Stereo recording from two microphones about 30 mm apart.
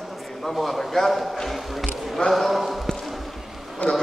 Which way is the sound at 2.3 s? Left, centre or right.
Centre.